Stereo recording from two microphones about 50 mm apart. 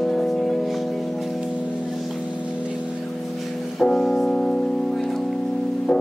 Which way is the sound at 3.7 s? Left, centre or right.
Centre.